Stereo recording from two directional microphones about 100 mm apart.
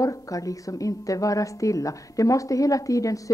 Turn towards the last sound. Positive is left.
turn(degrees=35)  # may be behind; listen again after turning